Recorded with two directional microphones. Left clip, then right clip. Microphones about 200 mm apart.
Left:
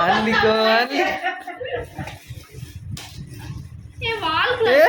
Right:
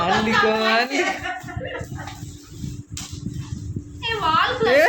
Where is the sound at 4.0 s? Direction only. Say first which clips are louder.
Right 1 dB; 20° right (ahead or behind).